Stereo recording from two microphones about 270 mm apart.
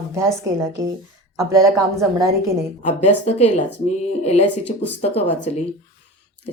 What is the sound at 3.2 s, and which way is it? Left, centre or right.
A woman's voice, left.